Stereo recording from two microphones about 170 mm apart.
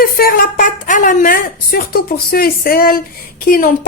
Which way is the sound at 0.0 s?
60° left (ahead or behind).